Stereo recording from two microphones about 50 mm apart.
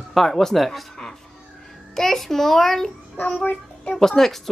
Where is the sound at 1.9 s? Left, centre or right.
Centre.